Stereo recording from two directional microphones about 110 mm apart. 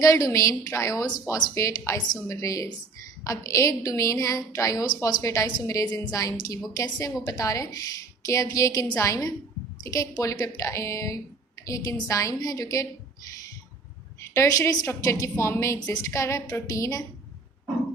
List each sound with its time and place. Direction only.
0.0 s a woman's voice: 30° left (ahead or behind)
14.3 s a woman's voice: 25° left (ahead or behind)